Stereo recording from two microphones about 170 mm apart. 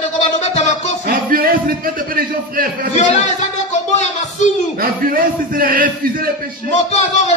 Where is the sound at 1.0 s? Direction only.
60° right (ahead or behind).